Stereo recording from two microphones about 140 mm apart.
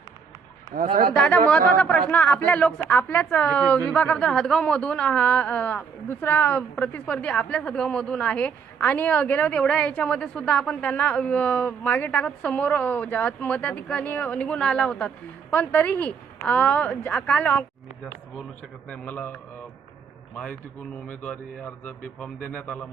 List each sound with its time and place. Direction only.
0.7 s speech: 70° right (ahead or behind)
1.1 s a man's voice: 10° left (ahead or behind)